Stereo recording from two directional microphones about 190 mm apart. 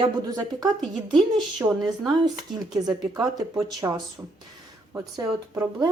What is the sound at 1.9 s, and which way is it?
Speech, 20° right (ahead or behind).